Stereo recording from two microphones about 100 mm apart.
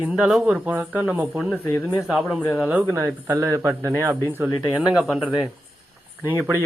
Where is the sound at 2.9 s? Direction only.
25° right (ahead or behind).